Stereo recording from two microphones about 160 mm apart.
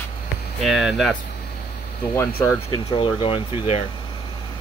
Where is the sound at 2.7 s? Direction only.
30° left (ahead or behind).